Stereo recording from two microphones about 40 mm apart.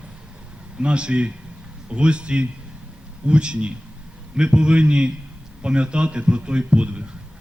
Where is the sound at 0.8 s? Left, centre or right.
Right.